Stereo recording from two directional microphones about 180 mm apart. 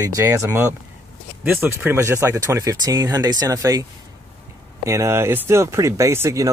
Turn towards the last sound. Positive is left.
turn(degrees=-15)  # may be behind; listen again after turning